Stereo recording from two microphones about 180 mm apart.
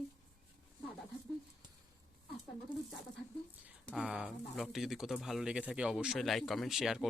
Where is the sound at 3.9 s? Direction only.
5° right (ahead or behind).